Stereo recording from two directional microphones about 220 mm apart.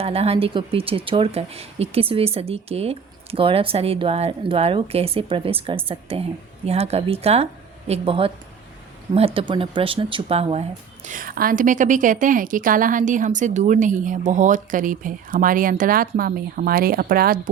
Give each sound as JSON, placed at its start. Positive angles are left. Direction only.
{"t": 0.0, "sound": "speech", "side_deg": -25}